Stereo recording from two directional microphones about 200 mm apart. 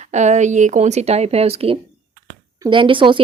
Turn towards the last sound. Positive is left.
turn(degrees=-25)  # may be behind; listen again after turning